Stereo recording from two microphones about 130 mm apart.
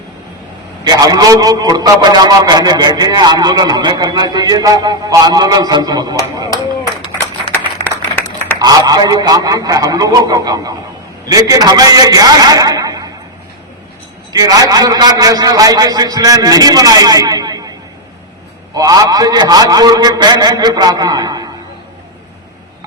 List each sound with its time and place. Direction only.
0.9 s a man's voice: 30° right (ahead or behind)
8.5 s a man's voice: 30° right (ahead or behind)
14.3 s a man's voice: 30° right (ahead or behind)